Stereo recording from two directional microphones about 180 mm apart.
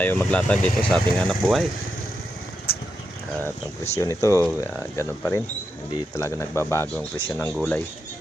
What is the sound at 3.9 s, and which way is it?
Speech, 15° left (ahead or behind).